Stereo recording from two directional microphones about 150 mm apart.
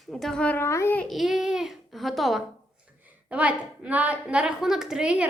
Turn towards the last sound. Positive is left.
turn(degrees=-5)  # may be behind; listen again after turning